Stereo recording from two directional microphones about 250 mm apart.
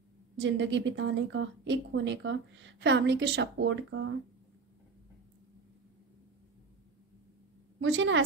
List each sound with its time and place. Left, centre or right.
0.4 s a woman's voice: right
7.8 s a woman's voice: right